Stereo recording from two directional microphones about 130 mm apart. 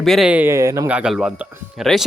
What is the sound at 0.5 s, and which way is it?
Speech, 25° right (ahead or behind).